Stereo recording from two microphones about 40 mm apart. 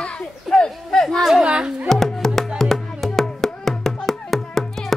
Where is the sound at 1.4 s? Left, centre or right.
Centre.